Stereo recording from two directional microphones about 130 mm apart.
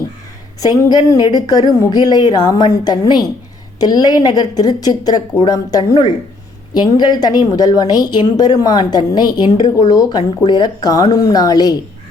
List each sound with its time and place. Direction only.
0.6 s a woman's voice: 30° left (ahead or behind)